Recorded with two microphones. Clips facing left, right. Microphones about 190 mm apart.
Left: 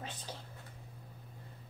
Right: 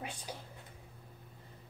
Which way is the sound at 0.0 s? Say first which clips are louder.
Right 2 dB; 10° right (ahead or behind).